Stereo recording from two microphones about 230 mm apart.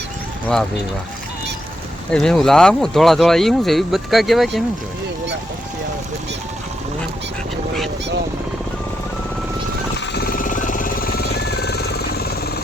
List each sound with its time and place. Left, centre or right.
2.0 s speech: centre
10.2 s music: left